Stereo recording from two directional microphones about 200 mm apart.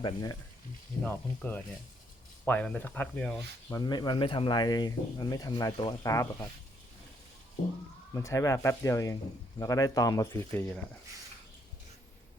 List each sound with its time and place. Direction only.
0.0 s speech: 20° left (ahead or behind)
3.8 s speech: 20° left (ahead or behind)
8.1 s speech: 15° left (ahead or behind)